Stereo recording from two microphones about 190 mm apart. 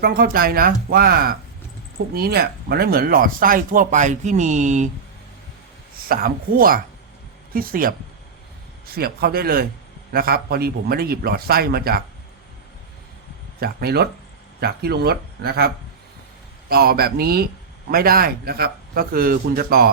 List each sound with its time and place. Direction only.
0.0 s speech: 50° right (ahead or behind)
6.1 s speech: 50° right (ahead or behind)
9.0 s speech: 55° right (ahead or behind)
13.6 s speech: 55° right (ahead or behind)